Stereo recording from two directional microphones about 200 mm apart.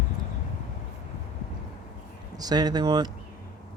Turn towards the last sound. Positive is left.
turn(degrees=-20)  # may be behind; listen again after turning